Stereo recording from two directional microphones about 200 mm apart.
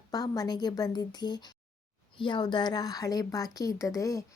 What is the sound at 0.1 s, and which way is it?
A woman's voice, 20° left (ahead or behind).